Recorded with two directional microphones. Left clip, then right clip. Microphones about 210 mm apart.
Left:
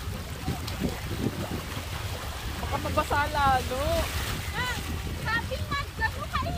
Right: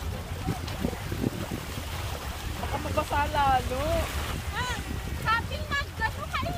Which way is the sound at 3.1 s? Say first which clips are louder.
Even; 15° left (ahead or behind).